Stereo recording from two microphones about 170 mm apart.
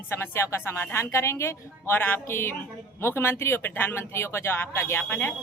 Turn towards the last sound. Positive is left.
turn(degrees=10)  # may be behind; listen again after turning